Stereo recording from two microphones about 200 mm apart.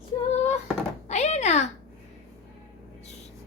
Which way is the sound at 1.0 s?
35° left (ahead or behind).